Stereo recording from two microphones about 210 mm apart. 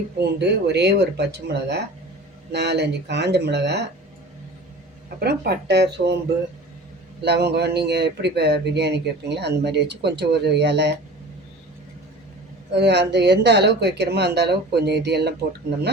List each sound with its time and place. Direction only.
0.2 s speech: 55° right (ahead or behind)
5.0 s speech: 50° right (ahead or behind)
7.2 s speech: 50° right (ahead or behind)
12.7 s speech: 55° right (ahead or behind)